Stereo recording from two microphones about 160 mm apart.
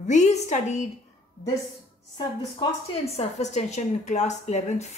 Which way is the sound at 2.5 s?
40° left (ahead or behind).